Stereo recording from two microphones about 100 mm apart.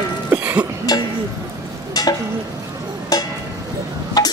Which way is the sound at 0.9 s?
40° left (ahead or behind).